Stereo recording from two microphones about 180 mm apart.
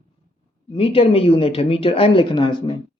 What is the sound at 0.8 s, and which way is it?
Speech, 30° left (ahead or behind).